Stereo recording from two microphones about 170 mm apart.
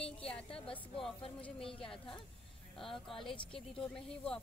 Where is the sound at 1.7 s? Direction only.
5° left (ahead or behind).